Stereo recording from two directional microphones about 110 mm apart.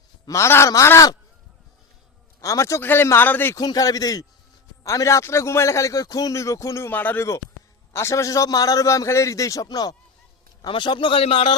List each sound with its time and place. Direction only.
0.3 s a man's voice: 25° left (ahead or behind)
2.4 s a man's voice: 30° left (ahead or behind)
3.5 s a man's voice: 35° left (ahead or behind); by 11.5 s 55° left (ahead or behind)